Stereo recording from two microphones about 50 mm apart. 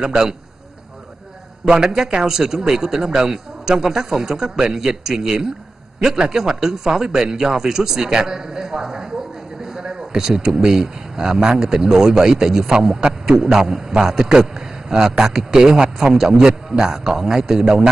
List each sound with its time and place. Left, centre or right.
0.0 s a man's voice: centre
2.0 s a man's voice: centre